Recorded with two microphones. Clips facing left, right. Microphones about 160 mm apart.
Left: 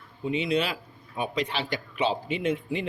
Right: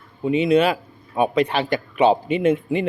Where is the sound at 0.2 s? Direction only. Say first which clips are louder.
Right 9 dB; 55° right (ahead or behind).